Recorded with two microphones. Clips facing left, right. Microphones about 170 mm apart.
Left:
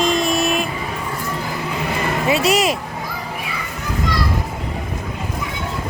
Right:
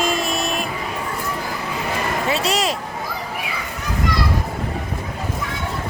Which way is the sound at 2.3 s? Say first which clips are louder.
Left 6 dB; 10° left (ahead or behind).